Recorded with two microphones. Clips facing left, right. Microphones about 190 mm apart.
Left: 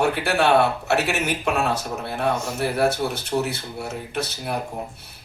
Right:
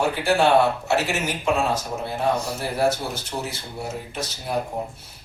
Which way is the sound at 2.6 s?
60° left (ahead or behind).